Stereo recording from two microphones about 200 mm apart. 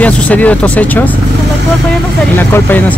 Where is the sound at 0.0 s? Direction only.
5° left (ahead or behind).